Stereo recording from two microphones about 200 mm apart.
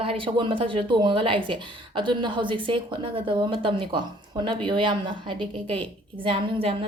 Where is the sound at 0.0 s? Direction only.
25° right (ahead or behind).